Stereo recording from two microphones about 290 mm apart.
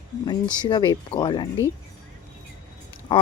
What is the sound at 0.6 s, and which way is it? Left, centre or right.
Speech, centre.